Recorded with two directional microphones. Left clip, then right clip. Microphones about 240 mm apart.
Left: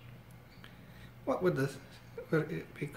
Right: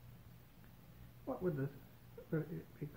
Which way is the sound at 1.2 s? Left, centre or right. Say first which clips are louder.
Left 10 dB; left.